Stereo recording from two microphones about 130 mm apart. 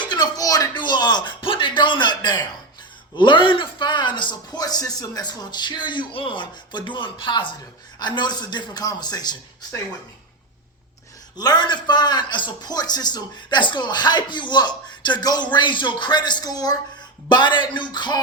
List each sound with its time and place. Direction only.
0.1 s a sound: 30° left (ahead or behind)
1.5 s a man's voice: 40° left (ahead or behind)
11.3 s a man's voice: 30° left (ahead or behind)